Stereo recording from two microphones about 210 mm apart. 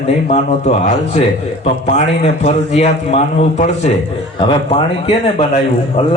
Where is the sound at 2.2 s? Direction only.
30° left (ahead or behind).